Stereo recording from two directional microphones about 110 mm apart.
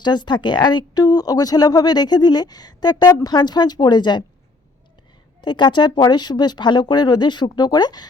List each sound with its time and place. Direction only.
0.0 s speech: 40° left (ahead or behind)
5.4 s speech: 45° left (ahead or behind)